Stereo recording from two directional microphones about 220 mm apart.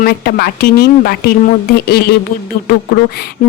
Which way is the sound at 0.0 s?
45° left (ahead or behind).